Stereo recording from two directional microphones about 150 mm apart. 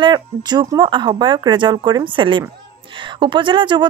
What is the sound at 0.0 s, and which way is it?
Speech, 30° right (ahead or behind).